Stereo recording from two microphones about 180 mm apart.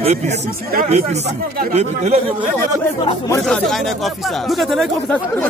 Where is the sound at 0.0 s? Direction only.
35° right (ahead or behind).